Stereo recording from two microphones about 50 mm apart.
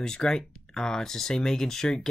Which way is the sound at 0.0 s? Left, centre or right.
Centre.